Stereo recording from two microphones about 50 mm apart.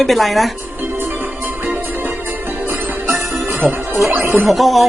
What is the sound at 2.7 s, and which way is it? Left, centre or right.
Music, right.